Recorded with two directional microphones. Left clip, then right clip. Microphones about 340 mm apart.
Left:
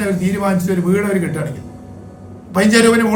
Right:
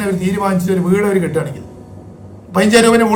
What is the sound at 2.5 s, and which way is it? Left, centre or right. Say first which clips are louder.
Speech: right 2 dB; centre.